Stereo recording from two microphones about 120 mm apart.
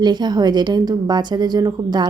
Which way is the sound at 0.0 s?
35° right (ahead or behind).